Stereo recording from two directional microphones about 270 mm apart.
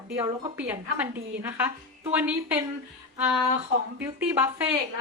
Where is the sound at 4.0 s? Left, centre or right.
Centre.